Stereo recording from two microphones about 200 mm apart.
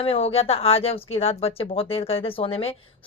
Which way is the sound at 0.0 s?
30° left (ahead or behind).